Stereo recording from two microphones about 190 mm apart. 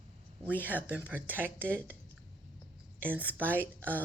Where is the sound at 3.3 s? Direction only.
10° right (ahead or behind).